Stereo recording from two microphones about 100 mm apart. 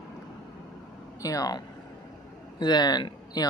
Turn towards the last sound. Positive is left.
turn(degrees=45)  # may be behind; listen again after turning